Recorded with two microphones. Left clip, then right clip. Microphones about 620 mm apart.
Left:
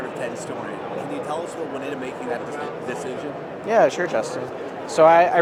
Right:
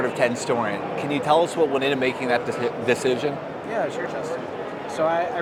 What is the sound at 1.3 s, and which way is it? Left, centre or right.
Speech, right.